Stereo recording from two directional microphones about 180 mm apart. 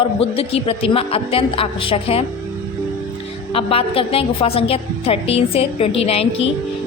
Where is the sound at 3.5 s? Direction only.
30° left (ahead or behind).